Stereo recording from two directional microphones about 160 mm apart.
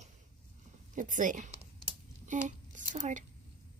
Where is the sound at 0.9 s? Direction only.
50° right (ahead or behind).